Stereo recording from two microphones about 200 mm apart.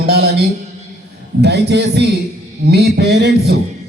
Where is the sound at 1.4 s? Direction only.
55° right (ahead or behind).